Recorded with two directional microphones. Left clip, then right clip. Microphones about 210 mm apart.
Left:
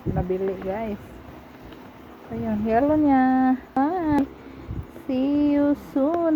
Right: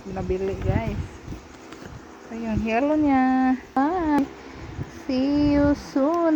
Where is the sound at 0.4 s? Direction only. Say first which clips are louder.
Left 1 dB; 5° right (ahead or behind).